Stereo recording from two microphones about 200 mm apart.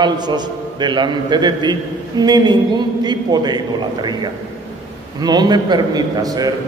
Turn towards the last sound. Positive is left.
turn(degrees=-20)  # may be behind; listen again after turning